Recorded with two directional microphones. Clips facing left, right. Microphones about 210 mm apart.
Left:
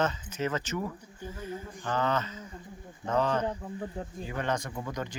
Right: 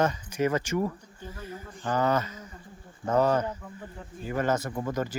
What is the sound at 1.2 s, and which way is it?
Speech, 10° left (ahead or behind).